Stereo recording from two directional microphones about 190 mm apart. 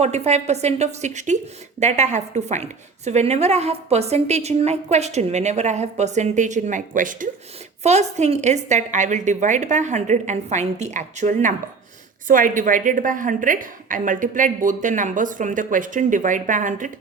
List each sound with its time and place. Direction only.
0.0 s a woman's voice: 35° right (ahead or behind)